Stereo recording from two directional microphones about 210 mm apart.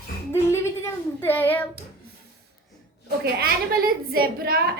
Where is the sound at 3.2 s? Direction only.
45° right (ahead or behind).